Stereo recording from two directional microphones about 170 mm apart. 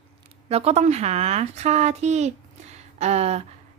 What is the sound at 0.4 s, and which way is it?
A woman's voice, 40° right (ahead or behind).